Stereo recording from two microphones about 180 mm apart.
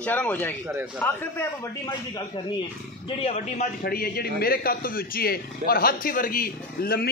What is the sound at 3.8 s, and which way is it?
A man's voice, 55° left (ahead or behind).